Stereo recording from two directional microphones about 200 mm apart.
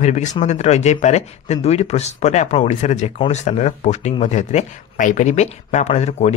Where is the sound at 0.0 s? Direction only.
35° left (ahead or behind).